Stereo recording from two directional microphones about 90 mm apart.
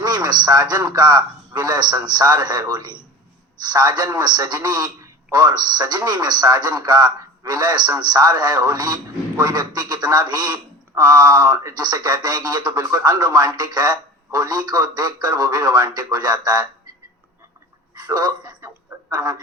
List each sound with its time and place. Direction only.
0.0 s a man's voice: 50° right (ahead or behind)
17.9 s a man's voice: 50° right (ahead or behind)